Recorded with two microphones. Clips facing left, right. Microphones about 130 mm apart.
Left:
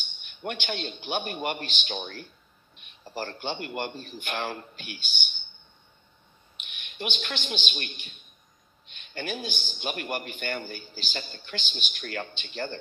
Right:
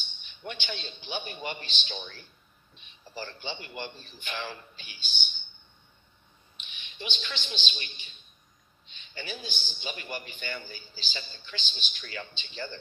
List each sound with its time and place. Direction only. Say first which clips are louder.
0.2 s a man's voice: left 5 dB; 55° left (ahead or behind)
6.6 s a man's voice: left 6 dB; 60° left (ahead or behind)